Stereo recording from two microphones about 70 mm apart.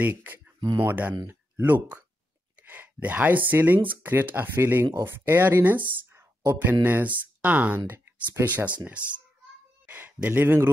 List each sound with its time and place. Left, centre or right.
0.1 s speech: right
6.6 s speech: right
9.8 s a sound: right